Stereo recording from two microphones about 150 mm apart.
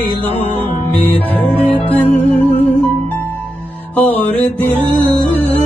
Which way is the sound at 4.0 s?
10° left (ahead or behind).